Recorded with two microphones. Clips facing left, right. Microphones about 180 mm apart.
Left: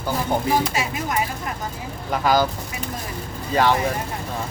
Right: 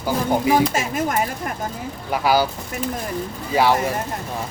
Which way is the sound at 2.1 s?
10° right (ahead or behind).